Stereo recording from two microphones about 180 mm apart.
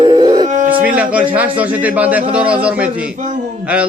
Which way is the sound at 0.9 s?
10° right (ahead or behind).